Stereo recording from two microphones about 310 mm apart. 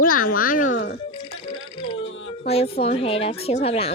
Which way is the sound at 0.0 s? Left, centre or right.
Left.